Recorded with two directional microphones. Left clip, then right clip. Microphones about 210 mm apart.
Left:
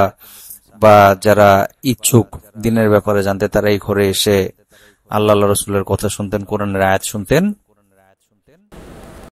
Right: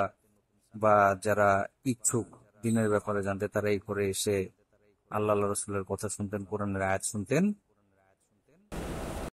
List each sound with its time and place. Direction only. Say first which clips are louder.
0.7 s speech: left 16 dB; 40° left (ahead or behind)